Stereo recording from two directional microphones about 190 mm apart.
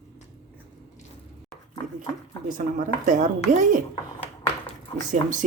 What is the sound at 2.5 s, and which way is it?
Speech, 40° right (ahead or behind).